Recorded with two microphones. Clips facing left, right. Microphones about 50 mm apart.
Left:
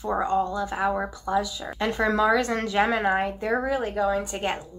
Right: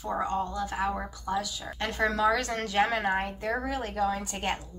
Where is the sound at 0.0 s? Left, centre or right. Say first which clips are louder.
Left 6 dB; left.